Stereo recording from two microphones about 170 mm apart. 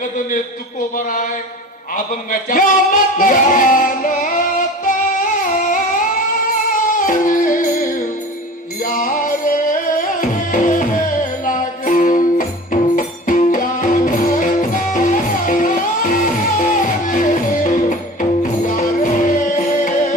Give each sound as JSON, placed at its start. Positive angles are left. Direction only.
{"t": 0.9, "sound": "a sound", "side_deg": 50}
{"t": 2.3, "sound": "female singing", "side_deg": 55}
{"t": 6.8, "sound": "music", "side_deg": 50}